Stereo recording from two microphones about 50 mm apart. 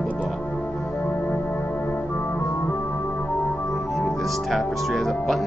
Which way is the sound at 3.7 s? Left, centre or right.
Centre.